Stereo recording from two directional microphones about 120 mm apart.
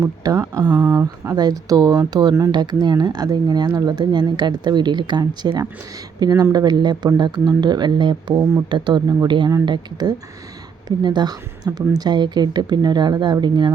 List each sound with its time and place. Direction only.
0.0 s speech: 30° right (ahead or behind)
0.7 s speech: 15° right (ahead or behind)
1.4 s speech: 35° right (ahead or behind)